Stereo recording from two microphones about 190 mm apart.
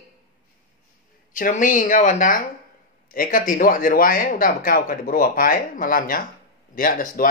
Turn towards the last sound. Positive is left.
turn(degrees=45)  # may be behind; listen again after turning